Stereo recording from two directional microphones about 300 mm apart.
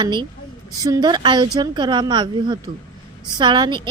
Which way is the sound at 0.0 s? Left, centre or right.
Centre.